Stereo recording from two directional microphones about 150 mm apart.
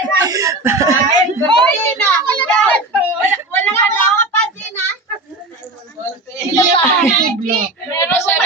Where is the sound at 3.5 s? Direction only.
15° left (ahead or behind).